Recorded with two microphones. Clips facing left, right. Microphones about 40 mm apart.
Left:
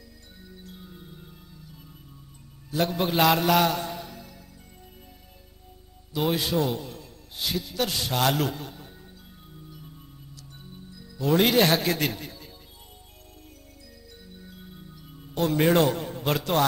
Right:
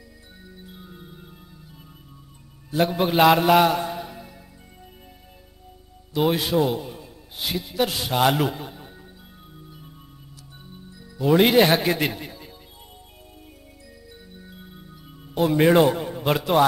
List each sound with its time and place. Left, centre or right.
0.4 s music: centre
6.1 s a man's voice: centre
9.5 s music: centre
14.2 s music: centre